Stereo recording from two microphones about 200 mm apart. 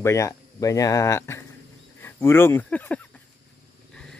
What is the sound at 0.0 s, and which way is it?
Speech, 15° left (ahead or behind).